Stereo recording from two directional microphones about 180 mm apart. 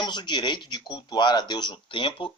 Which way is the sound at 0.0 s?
25° left (ahead or behind).